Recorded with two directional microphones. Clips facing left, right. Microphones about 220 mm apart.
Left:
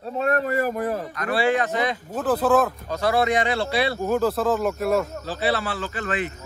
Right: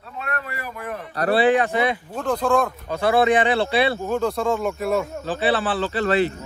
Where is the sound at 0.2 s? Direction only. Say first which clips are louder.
Left 9 dB; 40° left (ahead or behind).